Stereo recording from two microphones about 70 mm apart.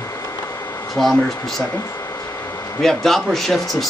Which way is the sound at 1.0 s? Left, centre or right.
Centre.